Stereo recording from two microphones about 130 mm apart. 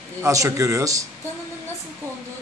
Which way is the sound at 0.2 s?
25° right (ahead or behind).